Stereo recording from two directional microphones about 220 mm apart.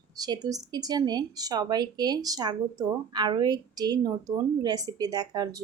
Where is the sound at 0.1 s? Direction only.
15° right (ahead or behind).